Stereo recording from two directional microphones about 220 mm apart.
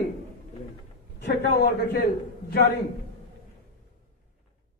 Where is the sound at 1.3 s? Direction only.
45° left (ahead or behind).